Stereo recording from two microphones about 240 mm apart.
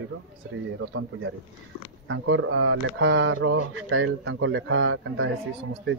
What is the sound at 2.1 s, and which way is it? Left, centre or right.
Speech, right.